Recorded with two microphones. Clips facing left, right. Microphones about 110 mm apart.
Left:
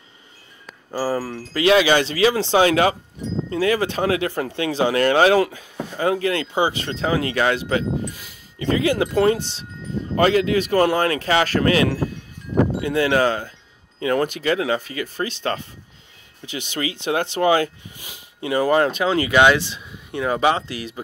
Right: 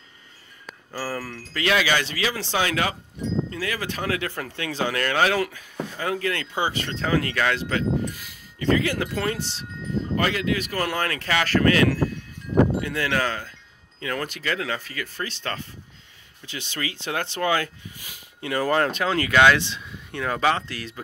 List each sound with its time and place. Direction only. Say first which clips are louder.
0.9 s speech: left 8 dB; 25° left (ahead or behind)